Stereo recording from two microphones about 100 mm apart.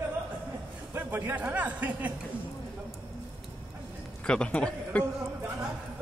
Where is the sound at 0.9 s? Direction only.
20° right (ahead or behind).